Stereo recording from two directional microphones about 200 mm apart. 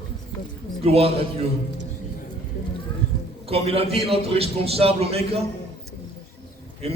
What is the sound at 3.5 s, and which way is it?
A man's voice, 30° right (ahead or behind).